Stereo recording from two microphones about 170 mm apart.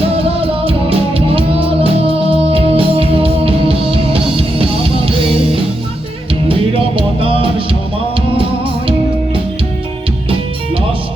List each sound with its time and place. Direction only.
0.0 s music: 35° right (ahead or behind)
6.5 s music: 30° right (ahead or behind)